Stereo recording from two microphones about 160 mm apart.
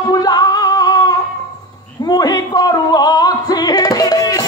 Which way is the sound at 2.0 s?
25° left (ahead or behind).